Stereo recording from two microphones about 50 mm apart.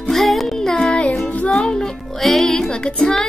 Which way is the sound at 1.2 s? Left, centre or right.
Left.